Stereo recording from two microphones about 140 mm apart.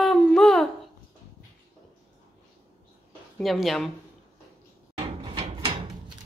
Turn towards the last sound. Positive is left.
turn(degrees=-40)  # may be behind; listen again after turning